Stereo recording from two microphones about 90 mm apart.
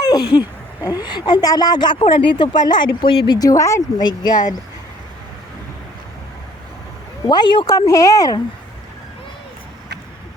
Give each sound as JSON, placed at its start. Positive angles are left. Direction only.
{"t": 0.0, "sound": "a woman's voice", "side_deg": 50}
{"t": 2.0, "sound": "speech", "side_deg": 80}
{"t": 3.3, "sound": "speech", "side_deg": 40}
{"t": 4.0, "sound": "speech", "side_deg": 55}
{"t": 7.3, "sound": "speech", "side_deg": 55}